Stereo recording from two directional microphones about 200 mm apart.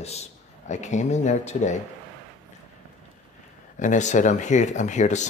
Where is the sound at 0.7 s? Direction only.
35° left (ahead or behind).